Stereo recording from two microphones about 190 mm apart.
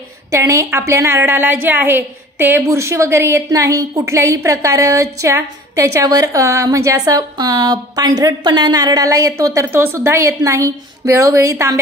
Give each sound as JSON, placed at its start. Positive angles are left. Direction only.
{"t": 0.3, "sound": "a woman's voice", "side_deg": -15}